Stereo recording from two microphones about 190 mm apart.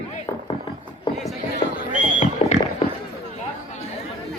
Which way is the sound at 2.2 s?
40° left (ahead or behind).